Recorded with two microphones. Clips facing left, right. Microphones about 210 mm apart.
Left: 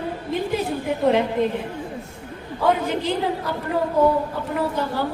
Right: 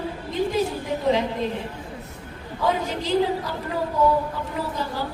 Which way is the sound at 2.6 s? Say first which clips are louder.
Left 4 dB; 60° left (ahead or behind).